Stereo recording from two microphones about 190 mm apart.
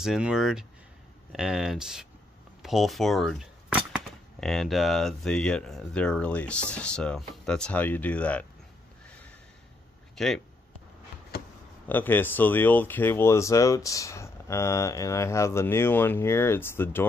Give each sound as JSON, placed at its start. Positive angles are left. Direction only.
{"t": 0.0, "sound": "speech", "side_deg": -5}
{"t": 10.1, "sound": "speech", "side_deg": 0}
{"t": 11.3, "sound": "a sound", "side_deg": 55}
{"t": 11.9, "sound": "speech", "side_deg": 10}